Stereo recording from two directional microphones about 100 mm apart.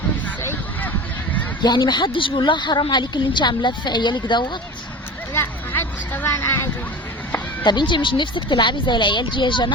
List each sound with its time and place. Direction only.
1.6 s speech: 45° left (ahead or behind)
5.3 s a sound: 25° left (ahead or behind)
7.6 s speech: 50° left (ahead or behind)